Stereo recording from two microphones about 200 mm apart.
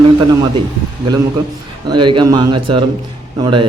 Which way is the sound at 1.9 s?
20° right (ahead or behind).